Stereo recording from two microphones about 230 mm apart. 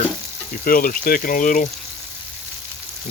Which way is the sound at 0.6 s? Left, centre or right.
Left.